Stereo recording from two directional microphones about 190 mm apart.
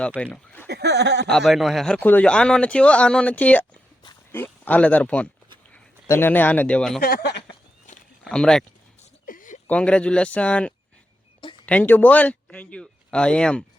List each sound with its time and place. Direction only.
0.2 s speech: 5° left (ahead or behind)
0.7 s a sound: 65° right (ahead or behind)
1.3 s a man's voice: centre (ahead or behind)
7.0 s speech: 55° left (ahead or behind)
8.2 s speech: 5° left (ahead or behind)
9.2 s a sound: 45° left (ahead or behind)
9.6 s a man's voice: 5° left (ahead or behind)